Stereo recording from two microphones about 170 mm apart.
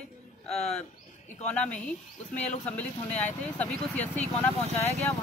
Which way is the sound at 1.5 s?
10° left (ahead or behind).